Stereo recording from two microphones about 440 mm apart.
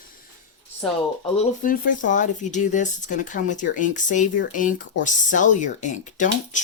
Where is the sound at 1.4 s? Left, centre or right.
Centre.